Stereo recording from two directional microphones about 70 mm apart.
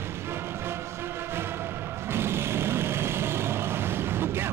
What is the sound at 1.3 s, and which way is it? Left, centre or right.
Music, right.